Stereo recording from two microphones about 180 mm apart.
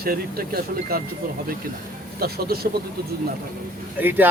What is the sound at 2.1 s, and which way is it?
Speech, 60° right (ahead or behind).